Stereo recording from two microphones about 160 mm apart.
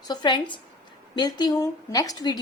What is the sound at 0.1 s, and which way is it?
A woman's voice, 25° left (ahead or behind).